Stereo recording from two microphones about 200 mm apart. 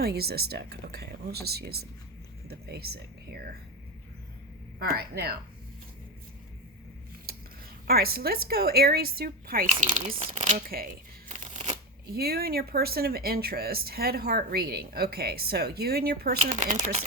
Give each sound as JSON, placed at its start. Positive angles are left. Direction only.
{"t": 0.0, "sound": "a woman's voice", "side_deg": -50}
{"t": 4.8, "sound": "a woman's voice", "side_deg": -50}
{"t": 7.3, "sound": "a sound", "side_deg": -50}
{"t": 7.9, "sound": "a woman's voice", "side_deg": -50}
{"t": 16.4, "sound": "speech", "side_deg": -40}